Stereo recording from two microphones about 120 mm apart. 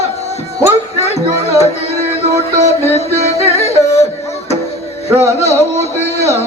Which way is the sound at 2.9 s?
60° left (ahead or behind).